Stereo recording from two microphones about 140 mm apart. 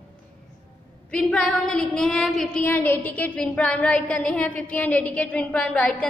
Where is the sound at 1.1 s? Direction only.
5° left (ahead or behind).